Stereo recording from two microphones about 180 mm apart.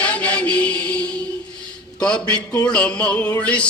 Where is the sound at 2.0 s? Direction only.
5° left (ahead or behind).